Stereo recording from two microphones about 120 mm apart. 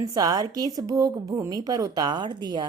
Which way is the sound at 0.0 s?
30° right (ahead or behind).